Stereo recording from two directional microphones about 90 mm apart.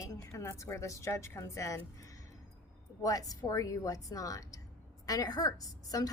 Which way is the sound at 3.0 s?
40° left (ahead or behind).